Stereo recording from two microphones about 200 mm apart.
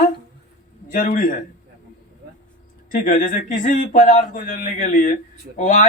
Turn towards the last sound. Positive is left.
turn(degrees=40)  # may be behind; listen again after turning